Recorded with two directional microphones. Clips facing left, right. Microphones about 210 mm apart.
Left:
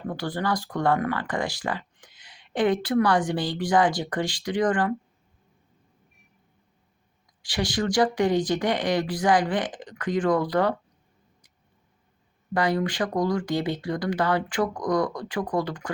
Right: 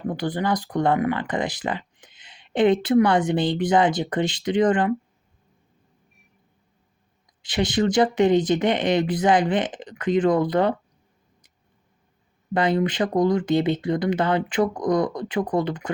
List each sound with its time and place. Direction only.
0.1 s speech: 20° right (ahead or behind)
7.4 s speech: 20° right (ahead or behind)
12.5 s speech: 20° right (ahead or behind)